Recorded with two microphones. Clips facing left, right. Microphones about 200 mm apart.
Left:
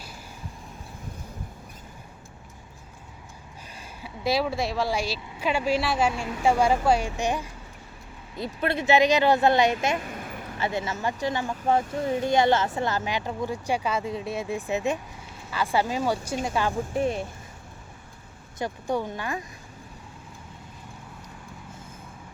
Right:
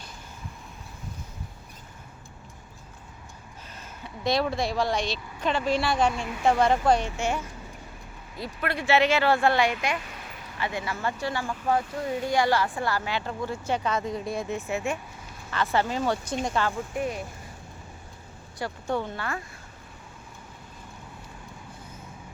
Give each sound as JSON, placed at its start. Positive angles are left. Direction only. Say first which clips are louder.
{"t": 4.0, "sound": "speech", "louder": "even", "side_deg": 5}
{"t": 10.0, "sound": "a sound", "louder": "left 7 dB", "side_deg": 50}
{"t": 10.6, "sound": "speech", "louder": "left 2 dB", "side_deg": 25}
{"t": 16.9, "sound": "speech", "louder": "left 4 dB", "side_deg": 30}
{"t": 18.6, "sound": "speech", "louder": "left 2 dB", "side_deg": 15}